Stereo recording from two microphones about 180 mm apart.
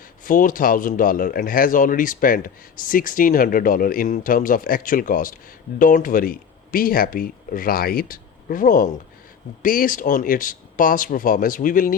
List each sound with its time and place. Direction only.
0.3 s speech: 50° left (ahead or behind)